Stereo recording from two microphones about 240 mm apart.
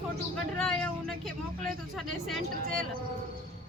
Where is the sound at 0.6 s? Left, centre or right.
Centre.